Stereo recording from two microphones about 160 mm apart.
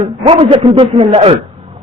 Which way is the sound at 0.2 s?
35° right (ahead or behind).